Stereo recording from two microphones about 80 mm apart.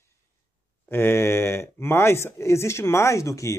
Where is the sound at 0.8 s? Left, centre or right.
Left.